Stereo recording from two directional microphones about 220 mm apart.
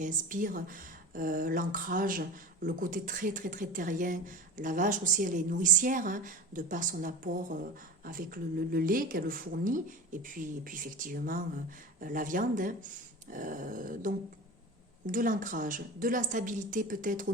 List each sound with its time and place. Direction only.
0.0 s speech: 35° right (ahead or behind)